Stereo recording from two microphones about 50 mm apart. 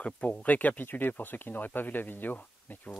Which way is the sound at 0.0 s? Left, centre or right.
Left.